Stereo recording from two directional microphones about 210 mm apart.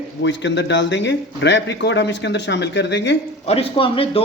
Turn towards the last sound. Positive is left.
turn(degrees=25)  # may be behind; listen again after turning